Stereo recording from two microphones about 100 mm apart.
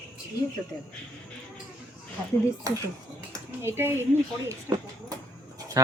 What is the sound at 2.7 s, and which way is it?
Speech, 35° right (ahead or behind).